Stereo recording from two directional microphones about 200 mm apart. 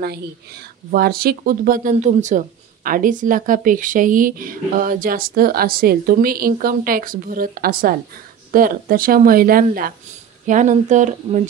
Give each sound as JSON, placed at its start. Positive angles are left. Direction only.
{"t": 0.9, "sound": "speech", "side_deg": -50}